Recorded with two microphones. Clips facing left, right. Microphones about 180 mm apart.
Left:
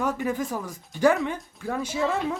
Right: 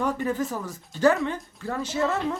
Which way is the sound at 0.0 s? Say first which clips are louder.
Right 1 dB; 5° left (ahead or behind).